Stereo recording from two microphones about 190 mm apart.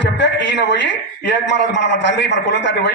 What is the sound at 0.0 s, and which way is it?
A man's voice, 70° left (ahead or behind).